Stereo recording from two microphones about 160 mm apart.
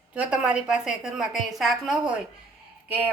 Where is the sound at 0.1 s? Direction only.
5° right (ahead or behind).